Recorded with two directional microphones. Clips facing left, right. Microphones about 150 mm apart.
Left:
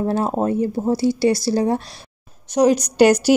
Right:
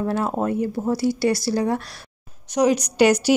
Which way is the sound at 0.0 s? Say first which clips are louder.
Left 3 dB; 30° left (ahead or behind).